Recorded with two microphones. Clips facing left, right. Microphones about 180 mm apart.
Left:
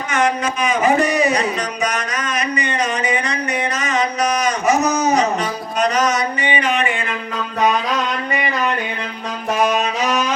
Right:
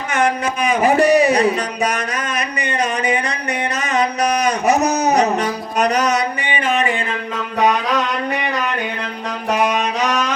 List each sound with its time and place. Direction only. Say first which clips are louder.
0.1 s a sound: even; 60° right (ahead or behind)
3.8 s music: right 2 dB; 60° right (ahead or behind); by 6.8 s 45° right (ahead or behind)
10.0 s music: even; 5° left (ahead or behind)